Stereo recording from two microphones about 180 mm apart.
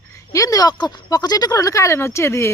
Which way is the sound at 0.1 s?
20° left (ahead or behind).